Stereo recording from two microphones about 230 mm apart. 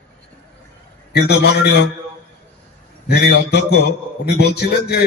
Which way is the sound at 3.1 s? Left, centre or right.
Left.